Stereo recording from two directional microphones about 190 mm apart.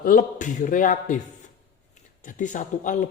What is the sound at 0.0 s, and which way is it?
Speech, 45° left (ahead or behind).